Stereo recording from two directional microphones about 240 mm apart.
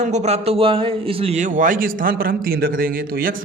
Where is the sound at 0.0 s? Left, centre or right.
Right.